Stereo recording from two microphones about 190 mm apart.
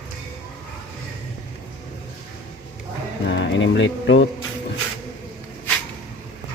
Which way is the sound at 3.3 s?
75° left (ahead or behind).